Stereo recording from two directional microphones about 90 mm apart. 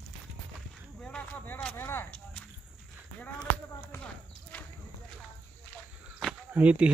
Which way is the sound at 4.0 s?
20° left (ahead or behind).